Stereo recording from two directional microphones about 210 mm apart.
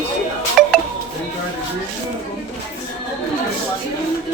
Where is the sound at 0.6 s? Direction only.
Centre (ahead or behind).